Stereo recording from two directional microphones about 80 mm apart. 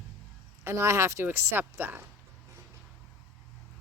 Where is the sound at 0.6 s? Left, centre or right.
Right.